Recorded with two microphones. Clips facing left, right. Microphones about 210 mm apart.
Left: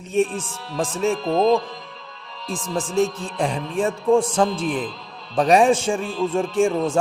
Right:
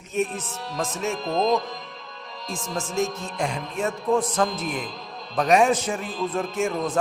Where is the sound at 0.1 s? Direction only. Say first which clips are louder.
Left 5 dB; 30° left (ahead or behind).